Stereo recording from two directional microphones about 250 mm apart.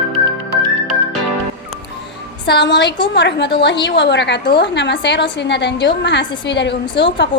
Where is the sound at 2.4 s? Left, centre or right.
Left.